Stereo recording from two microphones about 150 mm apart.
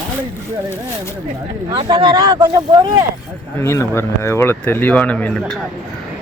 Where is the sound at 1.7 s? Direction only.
30° right (ahead or behind).